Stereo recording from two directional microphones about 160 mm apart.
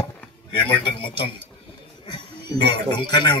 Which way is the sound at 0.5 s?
30° left (ahead or behind).